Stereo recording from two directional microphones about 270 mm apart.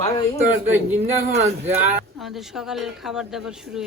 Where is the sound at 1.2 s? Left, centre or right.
Right.